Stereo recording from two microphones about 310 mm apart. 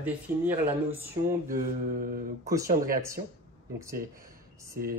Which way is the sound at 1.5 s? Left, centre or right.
Right.